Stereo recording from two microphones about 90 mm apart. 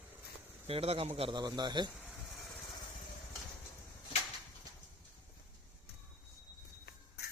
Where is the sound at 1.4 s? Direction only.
50° right (ahead or behind).